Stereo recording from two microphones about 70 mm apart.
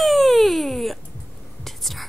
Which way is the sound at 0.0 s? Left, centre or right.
Centre.